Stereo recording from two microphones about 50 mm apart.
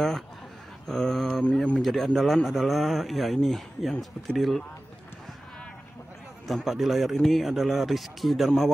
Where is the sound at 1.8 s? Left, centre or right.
Centre.